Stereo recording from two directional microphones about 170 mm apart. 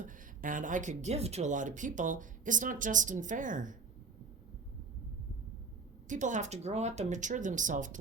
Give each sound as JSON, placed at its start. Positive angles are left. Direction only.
{"t": 0.0, "sound": "speech", "side_deg": -50}
{"t": 6.1, "sound": "speech", "side_deg": -45}